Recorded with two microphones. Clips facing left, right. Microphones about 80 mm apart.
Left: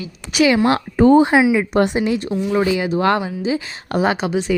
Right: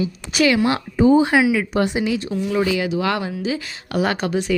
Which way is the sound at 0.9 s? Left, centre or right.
Left.